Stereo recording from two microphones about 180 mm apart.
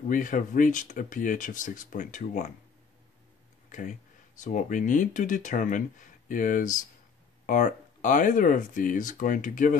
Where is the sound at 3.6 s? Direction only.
45° left (ahead or behind).